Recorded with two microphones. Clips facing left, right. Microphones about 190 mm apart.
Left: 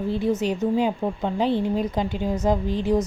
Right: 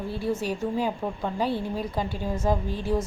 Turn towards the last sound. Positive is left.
turn(degrees=20)  # may be behind; listen again after turning